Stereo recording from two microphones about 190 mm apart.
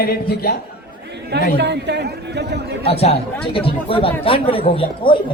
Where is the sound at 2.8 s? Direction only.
30° left (ahead or behind).